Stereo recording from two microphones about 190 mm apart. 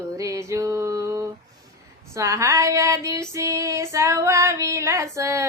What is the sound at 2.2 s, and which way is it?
Child singing, 15° right (ahead or behind).